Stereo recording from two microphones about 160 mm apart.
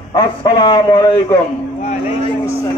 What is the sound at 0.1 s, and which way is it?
Speech, 25° left (ahead or behind).